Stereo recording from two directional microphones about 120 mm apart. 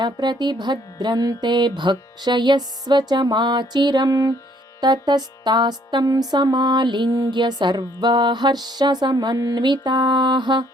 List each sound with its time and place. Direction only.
0.0 s music: 40° right (ahead or behind)